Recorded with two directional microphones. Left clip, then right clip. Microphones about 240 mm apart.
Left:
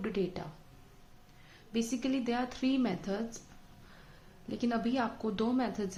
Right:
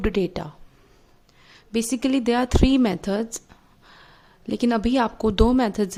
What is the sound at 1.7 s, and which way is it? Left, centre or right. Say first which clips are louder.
A woman's voice: right 11 dB; right.